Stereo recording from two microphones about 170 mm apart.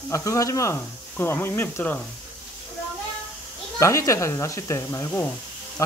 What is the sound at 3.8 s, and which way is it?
Speech, 15° left (ahead or behind).